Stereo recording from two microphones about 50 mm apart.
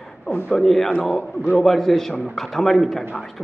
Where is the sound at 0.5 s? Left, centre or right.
Centre.